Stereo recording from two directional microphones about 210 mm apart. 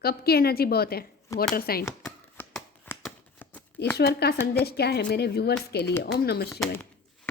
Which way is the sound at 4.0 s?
50° left (ahead or behind).